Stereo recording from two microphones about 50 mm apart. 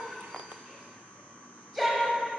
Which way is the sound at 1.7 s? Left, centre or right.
Centre.